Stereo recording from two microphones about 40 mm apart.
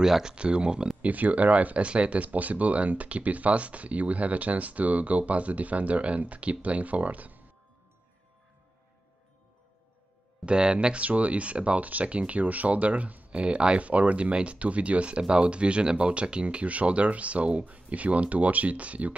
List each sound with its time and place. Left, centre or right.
0.0 s speech: centre
1.0 s speech: right
10.4 s speech: right
11.0 s speech: right
13.3 s speech: right